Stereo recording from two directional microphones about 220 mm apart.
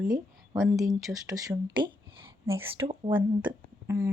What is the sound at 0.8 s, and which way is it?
Speech, 15° right (ahead or behind).